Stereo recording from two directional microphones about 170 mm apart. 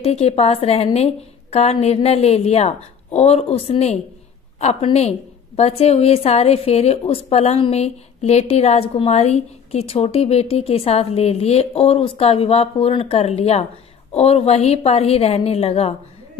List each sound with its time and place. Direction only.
0.0 s a woman's voice: 35° left (ahead or behind)